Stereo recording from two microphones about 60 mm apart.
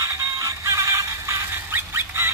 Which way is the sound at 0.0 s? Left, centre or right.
Right.